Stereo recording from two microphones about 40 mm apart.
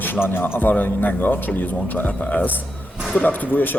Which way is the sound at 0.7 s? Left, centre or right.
Left.